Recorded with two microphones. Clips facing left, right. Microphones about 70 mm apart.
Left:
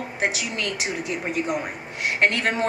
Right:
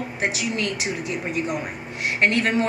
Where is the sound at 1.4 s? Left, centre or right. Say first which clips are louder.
Left 1 dB; centre.